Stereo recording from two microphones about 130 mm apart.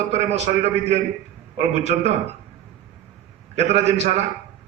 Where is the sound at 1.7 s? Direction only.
60° right (ahead or behind).